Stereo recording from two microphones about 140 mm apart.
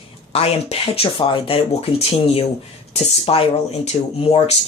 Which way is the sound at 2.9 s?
40° left (ahead or behind).